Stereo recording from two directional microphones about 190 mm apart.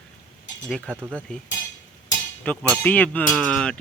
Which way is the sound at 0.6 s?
5° left (ahead or behind).